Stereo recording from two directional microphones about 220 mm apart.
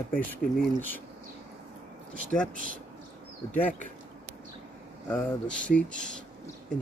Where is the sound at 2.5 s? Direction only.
40° right (ahead or behind).